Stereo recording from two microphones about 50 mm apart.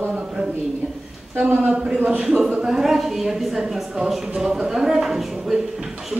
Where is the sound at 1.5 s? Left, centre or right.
Right.